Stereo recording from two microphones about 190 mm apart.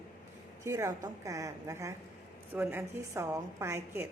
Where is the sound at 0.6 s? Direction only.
15° right (ahead or behind).